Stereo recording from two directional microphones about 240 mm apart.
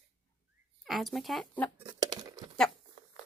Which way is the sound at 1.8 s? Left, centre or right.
Centre.